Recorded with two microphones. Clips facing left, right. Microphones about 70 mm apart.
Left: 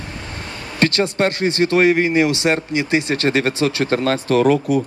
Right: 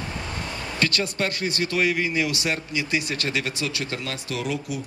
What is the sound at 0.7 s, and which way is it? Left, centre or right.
Speech, left.